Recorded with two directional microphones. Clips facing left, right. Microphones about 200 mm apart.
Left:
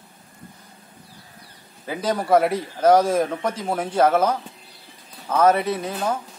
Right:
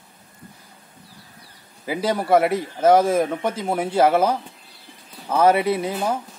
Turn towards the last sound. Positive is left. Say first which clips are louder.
# right 2 dB
turn(degrees=-10)  # may be behind; listen again after turning